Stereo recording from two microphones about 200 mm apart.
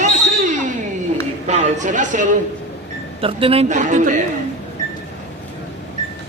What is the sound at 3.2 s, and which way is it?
A man's voice, 25° right (ahead or behind).